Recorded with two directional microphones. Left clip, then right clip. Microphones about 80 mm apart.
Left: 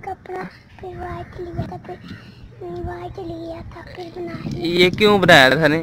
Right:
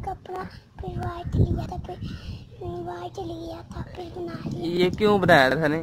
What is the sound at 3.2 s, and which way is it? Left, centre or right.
Speech, right.